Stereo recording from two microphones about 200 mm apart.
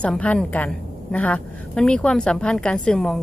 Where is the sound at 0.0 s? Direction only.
5° left (ahead or behind).